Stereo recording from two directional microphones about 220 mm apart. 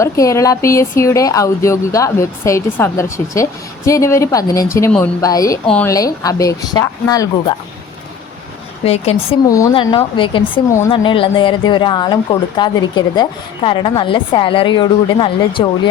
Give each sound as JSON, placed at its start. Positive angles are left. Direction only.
{"t": 0.0, "sound": "speech", "side_deg": 15}
{"t": 8.8, "sound": "a woman's voice", "side_deg": 30}
{"t": 9.5, "sound": "a woman's voice", "side_deg": 20}